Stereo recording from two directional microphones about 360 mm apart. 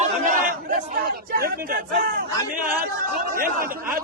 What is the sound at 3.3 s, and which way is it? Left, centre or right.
Speech, right.